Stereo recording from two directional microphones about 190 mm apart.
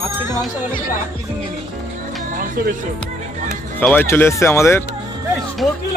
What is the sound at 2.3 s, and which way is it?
Music, 50° right (ahead or behind).